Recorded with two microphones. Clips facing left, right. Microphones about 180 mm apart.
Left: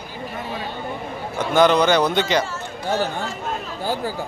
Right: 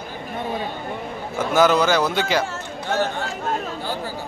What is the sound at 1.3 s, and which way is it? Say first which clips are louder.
Speech: left 1 dB; 5° right (ahead or behind).